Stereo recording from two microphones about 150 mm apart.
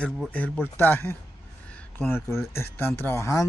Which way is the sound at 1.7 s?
15° left (ahead or behind).